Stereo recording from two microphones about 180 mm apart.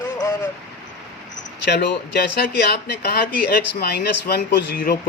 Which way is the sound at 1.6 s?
65° left (ahead or behind).